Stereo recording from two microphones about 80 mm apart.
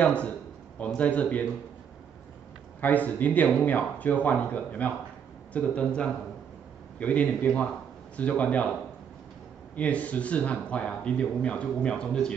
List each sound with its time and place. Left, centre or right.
0.0 s speech: centre
2.8 s speech: left
9.8 s speech: centre